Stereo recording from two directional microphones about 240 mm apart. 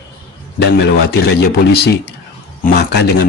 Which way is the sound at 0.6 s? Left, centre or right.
Left.